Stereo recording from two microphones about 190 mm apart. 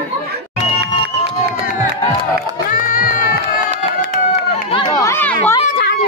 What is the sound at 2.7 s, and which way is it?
Music, 45° left (ahead or behind).